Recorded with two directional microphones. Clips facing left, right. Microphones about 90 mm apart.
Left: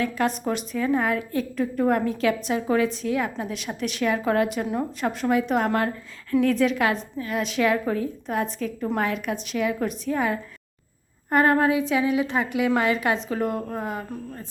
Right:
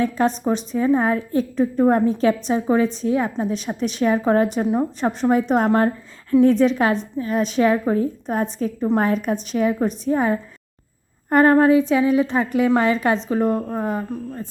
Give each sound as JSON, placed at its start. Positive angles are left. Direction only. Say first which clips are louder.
{"t": 0.0, "sound": "a woman's voice", "louder": "right 5 dB", "side_deg": -35}
{"t": 2.8, "sound": "a woman's voice", "louder": "right 4 dB", "side_deg": -35}